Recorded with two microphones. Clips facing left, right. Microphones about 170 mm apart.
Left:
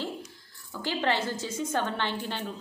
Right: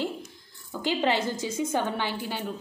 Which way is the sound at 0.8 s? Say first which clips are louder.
Right 3 dB; 15° right (ahead or behind).